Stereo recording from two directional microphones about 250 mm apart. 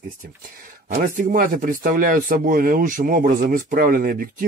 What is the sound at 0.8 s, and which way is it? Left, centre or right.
Speech, right.